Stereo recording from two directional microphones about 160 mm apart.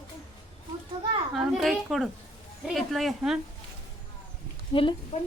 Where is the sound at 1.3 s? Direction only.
Centre (ahead or behind).